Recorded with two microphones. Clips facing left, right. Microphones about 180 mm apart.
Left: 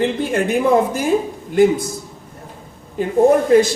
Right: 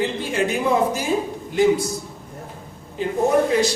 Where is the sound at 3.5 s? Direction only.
50° left (ahead or behind).